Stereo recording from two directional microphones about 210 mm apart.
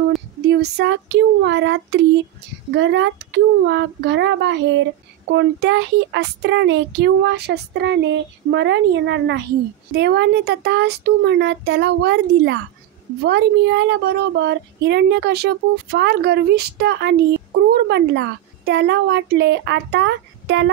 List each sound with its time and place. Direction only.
0.4 s speech: 50° right (ahead or behind)